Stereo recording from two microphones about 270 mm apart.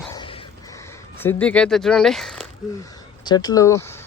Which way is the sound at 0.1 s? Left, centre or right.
Centre.